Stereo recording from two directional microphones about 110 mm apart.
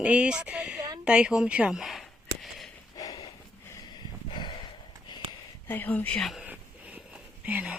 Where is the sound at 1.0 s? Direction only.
10° right (ahead or behind).